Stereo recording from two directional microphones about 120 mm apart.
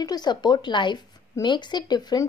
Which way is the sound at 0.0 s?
35° left (ahead or behind).